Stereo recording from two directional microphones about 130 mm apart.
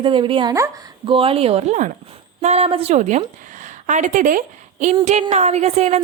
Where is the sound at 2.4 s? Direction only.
55° right (ahead or behind); by 4.9 s 80° right.